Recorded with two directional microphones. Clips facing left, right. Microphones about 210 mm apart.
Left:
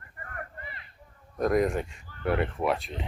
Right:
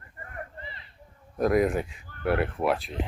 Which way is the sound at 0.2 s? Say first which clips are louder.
Right 1 dB; 25° right (ahead or behind).